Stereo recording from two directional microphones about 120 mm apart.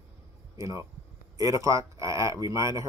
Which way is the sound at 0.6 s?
25° right (ahead or behind).